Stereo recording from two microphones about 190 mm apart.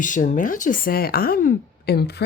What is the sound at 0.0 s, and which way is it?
Speech, 40° left (ahead or behind).